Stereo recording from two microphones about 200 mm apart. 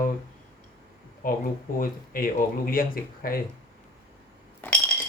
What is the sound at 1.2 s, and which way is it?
Speech, 45° left (ahead or behind).